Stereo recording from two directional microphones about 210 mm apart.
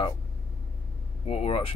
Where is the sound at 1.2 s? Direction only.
25° left (ahead or behind).